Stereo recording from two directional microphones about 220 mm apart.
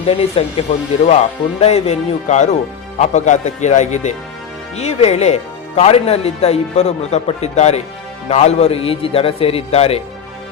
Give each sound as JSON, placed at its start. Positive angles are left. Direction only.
{"t": 0.0, "sound": "speech", "side_deg": 25}